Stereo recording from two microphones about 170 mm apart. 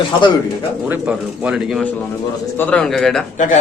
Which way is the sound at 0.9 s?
5° right (ahead or behind).